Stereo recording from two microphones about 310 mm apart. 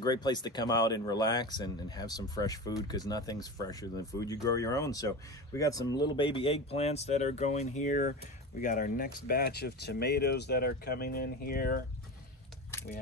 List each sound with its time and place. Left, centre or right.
0.0 s speech: centre; by 11.8 s left